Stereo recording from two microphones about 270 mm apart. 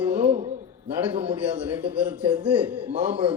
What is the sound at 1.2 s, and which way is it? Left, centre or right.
A man's voice, centre.